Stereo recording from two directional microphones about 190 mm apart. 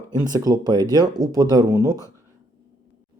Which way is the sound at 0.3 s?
20° right (ahead or behind).